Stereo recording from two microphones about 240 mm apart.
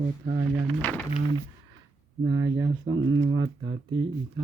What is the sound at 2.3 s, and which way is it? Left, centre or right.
Speech, centre.